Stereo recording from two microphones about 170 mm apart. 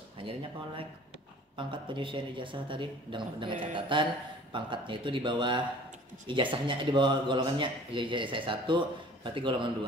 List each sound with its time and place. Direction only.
0.2 s speech: 30° right (ahead or behind)